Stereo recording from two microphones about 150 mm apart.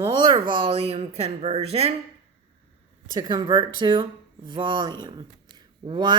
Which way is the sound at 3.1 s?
30° right (ahead or behind).